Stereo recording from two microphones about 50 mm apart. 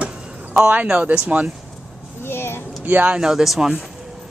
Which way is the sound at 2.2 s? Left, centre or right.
Left.